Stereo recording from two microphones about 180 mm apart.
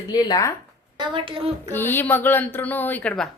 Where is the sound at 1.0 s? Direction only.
25° right (ahead or behind).